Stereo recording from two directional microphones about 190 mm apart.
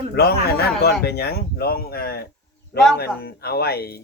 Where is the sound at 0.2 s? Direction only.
55° left (ahead or behind).